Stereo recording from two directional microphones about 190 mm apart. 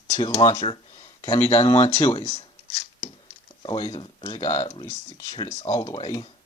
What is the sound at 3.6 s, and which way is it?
Speech, 20° left (ahead or behind).